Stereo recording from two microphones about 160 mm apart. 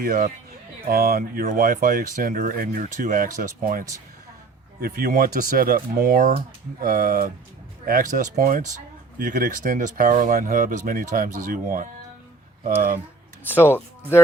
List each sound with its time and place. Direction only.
0.0 s speech: 60° right (ahead or behind)
4.8 s speech: 70° right (ahead or behind); by 13.0 s 55° right (ahead or behind)
13.5 s speech: 15° left (ahead or behind)